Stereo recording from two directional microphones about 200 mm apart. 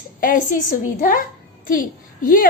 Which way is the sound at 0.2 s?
45° left (ahead or behind).